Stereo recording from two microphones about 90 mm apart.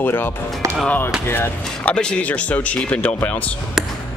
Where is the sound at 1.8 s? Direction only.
10° left (ahead or behind).